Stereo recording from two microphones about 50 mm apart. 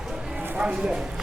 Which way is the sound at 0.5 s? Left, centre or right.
Centre.